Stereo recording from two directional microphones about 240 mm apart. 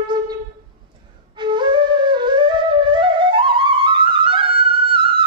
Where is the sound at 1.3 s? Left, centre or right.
Centre.